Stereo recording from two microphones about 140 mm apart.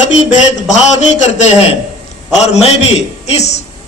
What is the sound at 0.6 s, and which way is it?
Speech, 55° left (ahead or behind).